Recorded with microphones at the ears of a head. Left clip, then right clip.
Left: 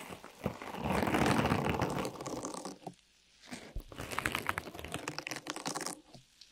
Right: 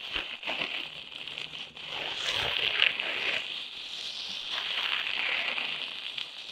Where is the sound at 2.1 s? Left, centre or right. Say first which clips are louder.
Right 12 dB; right.